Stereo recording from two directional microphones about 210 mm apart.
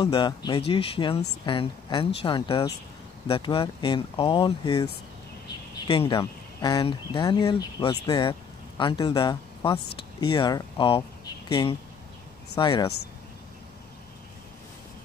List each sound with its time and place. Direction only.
0.0 s speech: 20° left (ahead or behind)
5.9 s speech: 25° left (ahead or behind)